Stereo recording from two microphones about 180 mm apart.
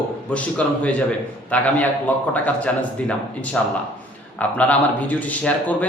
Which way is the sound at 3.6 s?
5° left (ahead or behind).